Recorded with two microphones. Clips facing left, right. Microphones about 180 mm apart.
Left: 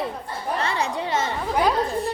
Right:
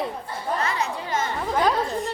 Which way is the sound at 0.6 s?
30° left (ahead or behind).